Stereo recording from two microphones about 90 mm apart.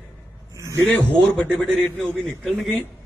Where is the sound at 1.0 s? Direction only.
10° left (ahead or behind).